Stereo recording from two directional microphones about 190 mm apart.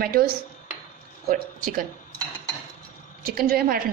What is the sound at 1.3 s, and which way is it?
Speech, 45° right (ahead or behind).